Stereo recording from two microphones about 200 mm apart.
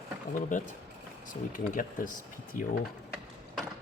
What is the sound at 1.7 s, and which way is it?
Speech, 40° left (ahead or behind).